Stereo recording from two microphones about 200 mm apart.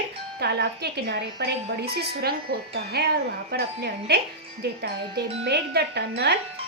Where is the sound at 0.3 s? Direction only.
55° right (ahead or behind).